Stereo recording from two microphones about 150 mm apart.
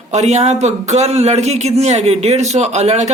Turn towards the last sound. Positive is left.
turn(degrees=-45)  # may be behind; listen again after turning